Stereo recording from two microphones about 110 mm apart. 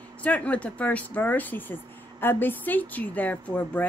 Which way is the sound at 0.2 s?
15° left (ahead or behind).